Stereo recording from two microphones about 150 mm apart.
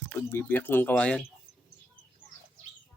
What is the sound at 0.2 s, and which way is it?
Speech, 15° left (ahead or behind).